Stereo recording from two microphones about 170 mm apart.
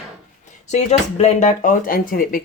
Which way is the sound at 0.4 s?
45° left (ahead or behind).